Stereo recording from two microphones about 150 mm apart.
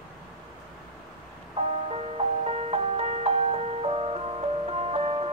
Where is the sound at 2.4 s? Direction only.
45° right (ahead or behind).